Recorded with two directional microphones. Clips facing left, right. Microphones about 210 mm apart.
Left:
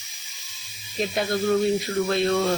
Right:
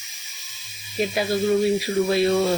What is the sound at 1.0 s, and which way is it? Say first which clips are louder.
Speech: right 2 dB; 5° right (ahead or behind).